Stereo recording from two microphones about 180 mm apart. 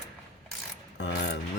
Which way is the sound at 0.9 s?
75° left (ahead or behind).